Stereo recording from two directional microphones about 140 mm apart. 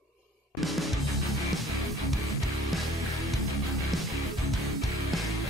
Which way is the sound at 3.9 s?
Centre (ahead or behind).